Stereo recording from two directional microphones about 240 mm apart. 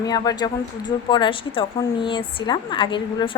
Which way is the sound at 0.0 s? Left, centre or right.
Centre.